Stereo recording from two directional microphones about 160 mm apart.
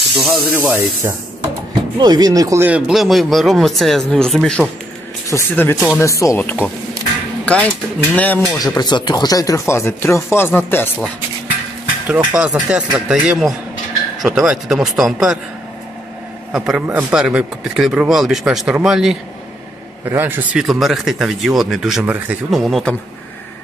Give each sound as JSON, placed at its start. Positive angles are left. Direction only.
{"t": 0.1, "sound": "speech", "side_deg": 0}
{"t": 0.6, "sound": "speech", "side_deg": -10}
{"t": 2.0, "sound": "speech", "side_deg": -25}
{"t": 2.9, "sound": "speech", "side_deg": 0}
{"t": 5.3, "sound": "speech", "side_deg": 15}
{"t": 8.5, "sound": "speech", "side_deg": 25}
{"t": 12.1, "sound": "speech", "side_deg": -10}
{"t": 16.5, "sound": "speech", "side_deg": -5}